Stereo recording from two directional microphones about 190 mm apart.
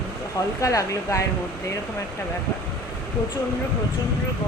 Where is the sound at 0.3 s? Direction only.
15° left (ahead or behind).